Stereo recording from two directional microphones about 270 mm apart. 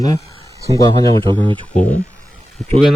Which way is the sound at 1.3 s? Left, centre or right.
Centre.